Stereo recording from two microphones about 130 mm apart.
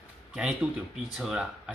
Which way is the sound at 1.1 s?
5° right (ahead or behind).